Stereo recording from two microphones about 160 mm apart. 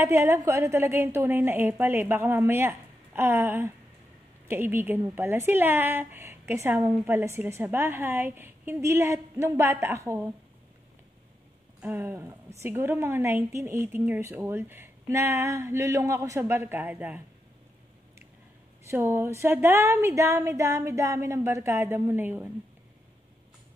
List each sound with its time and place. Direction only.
0.0 s a woman's voice: 15° right (ahead or behind)
11.8 s a woman's voice: 10° right (ahead or behind)
18.9 s a woman's voice: 15° right (ahead or behind)